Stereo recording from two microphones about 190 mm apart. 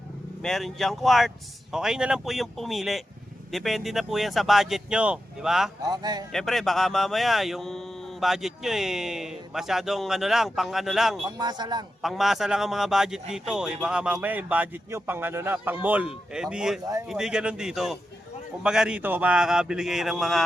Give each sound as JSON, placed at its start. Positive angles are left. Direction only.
{"t": 0.4, "sound": "speech", "side_deg": 0}
{"t": 5.8, "sound": "speech", "side_deg": -20}
{"t": 6.3, "sound": "speech", "side_deg": 0}
{"t": 11.3, "sound": "speech", "side_deg": -20}
{"t": 12.0, "sound": "speech", "side_deg": 0}